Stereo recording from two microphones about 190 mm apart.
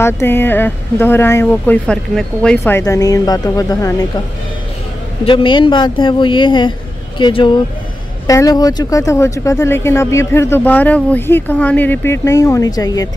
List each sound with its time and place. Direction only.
0.0 s speech: 10° left (ahead or behind)
5.2 s speech: 25° left (ahead or behind)